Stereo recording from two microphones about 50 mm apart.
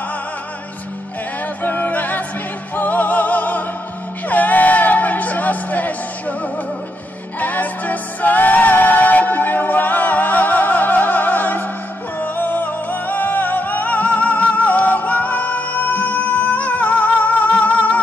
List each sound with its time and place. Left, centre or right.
1.6 s music: left
7.3 s music: left